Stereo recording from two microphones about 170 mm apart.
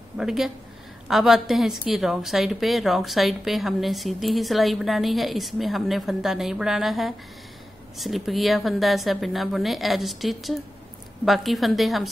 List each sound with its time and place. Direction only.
0.2 s a woman's voice: centre (ahead or behind)